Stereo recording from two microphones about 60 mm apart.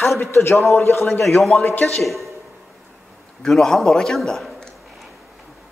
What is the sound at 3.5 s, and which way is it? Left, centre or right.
A man's voice, centre.